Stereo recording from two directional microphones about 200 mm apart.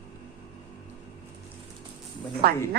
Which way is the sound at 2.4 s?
50° right (ahead or behind).